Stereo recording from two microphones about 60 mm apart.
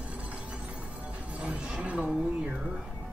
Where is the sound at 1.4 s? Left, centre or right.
Centre.